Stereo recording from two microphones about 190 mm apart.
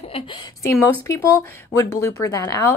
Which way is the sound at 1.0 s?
15° left (ahead or behind).